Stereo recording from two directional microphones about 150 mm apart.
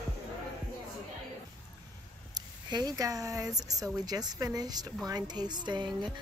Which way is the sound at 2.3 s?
25° right (ahead or behind).